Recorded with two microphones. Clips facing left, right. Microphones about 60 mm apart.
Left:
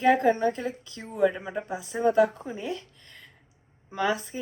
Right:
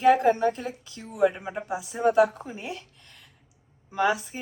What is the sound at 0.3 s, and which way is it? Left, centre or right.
A woman's voice, left.